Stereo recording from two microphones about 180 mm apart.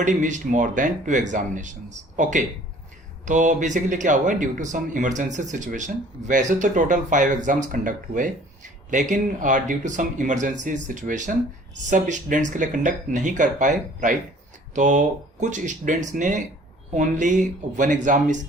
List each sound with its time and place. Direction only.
0.0 s speech: 45° right (ahead or behind)